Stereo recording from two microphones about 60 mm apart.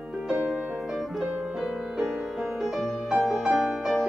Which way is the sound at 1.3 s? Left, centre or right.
Centre.